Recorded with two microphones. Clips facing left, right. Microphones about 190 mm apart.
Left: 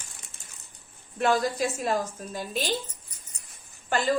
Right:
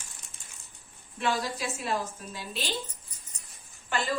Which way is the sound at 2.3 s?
45° left (ahead or behind).